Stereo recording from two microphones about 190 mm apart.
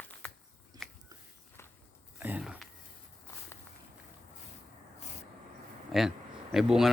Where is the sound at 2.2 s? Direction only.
5° right (ahead or behind).